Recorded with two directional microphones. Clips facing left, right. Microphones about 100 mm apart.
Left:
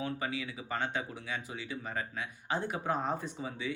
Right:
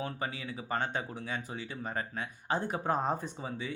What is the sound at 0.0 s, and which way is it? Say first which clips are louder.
Speech: left 1 dB; 35° right (ahead or behind).